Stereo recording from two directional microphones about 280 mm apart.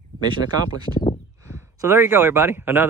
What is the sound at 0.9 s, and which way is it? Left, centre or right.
Speech, left.